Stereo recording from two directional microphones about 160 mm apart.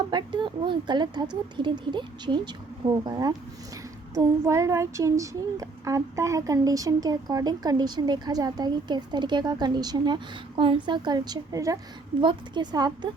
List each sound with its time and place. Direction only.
0.1 s child singing: 30° right (ahead or behind)